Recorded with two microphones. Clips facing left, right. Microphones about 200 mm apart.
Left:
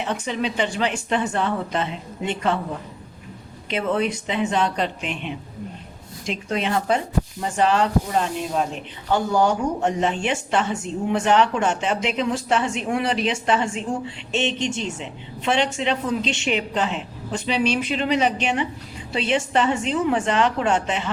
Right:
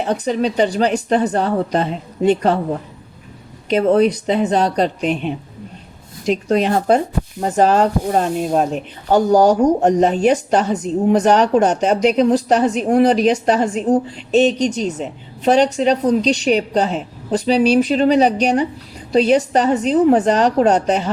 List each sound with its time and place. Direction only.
0.0 s speech: 40° right (ahead or behind)
3.7 s speech: 40° right (ahead or behind)